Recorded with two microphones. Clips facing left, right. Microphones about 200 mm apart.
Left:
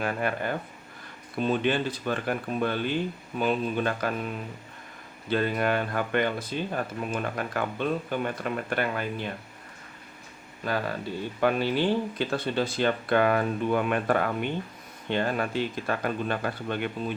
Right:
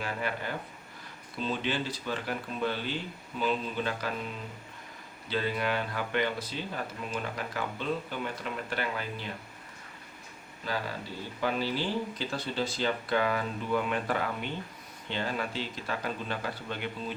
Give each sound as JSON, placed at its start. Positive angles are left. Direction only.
{"t": 0.0, "sound": "speech", "side_deg": 50}
{"t": 5.3, "sound": "speech", "side_deg": 50}
{"t": 10.6, "sound": "speech", "side_deg": 55}